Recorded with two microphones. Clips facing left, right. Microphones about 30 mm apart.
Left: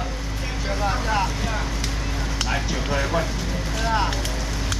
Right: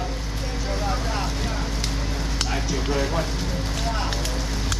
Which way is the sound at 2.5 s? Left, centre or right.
Centre.